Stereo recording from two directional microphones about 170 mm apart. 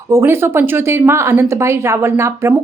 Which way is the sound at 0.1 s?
15° right (ahead or behind).